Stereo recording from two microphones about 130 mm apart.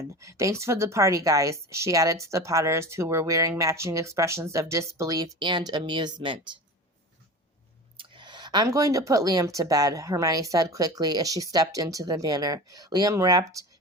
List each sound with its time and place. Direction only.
0.2 s speech: 25° right (ahead or behind); by 6.6 s 40° right (ahead or behind)
7.9 s speech: 40° right (ahead or behind)